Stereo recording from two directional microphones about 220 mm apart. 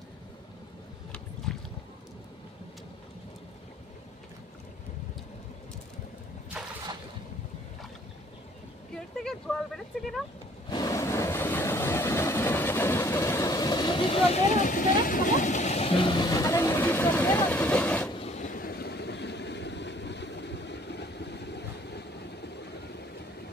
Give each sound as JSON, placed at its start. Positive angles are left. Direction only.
{"t": 1.5, "sound": "boat", "side_deg": 5}
{"t": 9.5, "sound": "a sound", "side_deg": 5}
{"t": 10.7, "sound": "vehicle", "side_deg": 15}
{"t": 18.2, "sound": "vehicle", "side_deg": 30}